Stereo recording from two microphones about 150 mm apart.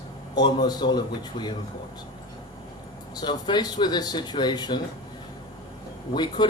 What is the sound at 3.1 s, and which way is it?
A man's voice, 30° left (ahead or behind).